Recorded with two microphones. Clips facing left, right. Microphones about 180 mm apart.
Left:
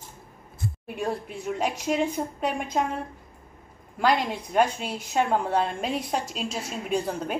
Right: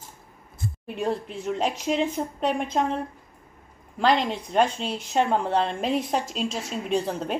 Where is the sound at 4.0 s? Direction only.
10° left (ahead or behind).